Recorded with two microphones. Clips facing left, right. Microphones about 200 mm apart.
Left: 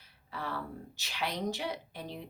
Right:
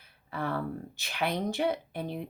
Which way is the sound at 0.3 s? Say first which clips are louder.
Right 6 dB; 55° right (ahead or behind).